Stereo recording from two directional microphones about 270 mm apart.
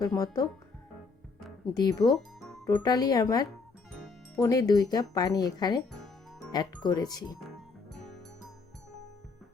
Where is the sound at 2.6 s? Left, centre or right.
Centre.